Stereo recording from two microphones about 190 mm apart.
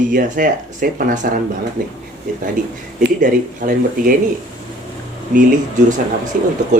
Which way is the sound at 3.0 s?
45° right (ahead or behind).